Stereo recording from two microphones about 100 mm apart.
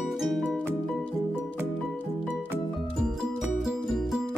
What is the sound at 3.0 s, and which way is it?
Music, 5° right (ahead or behind).